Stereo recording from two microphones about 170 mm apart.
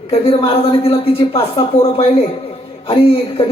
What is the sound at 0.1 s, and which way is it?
A man's voice, 30° left (ahead or behind).